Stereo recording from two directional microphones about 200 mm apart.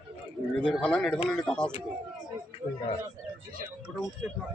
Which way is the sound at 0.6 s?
5° left (ahead or behind).